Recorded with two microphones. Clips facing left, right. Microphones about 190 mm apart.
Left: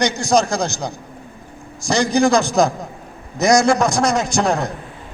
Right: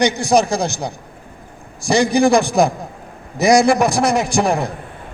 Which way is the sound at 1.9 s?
15° right (ahead or behind).